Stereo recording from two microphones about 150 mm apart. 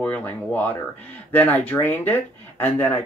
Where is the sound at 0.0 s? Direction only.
10° left (ahead or behind).